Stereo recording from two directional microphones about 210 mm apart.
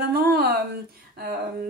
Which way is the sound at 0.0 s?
45° right (ahead or behind).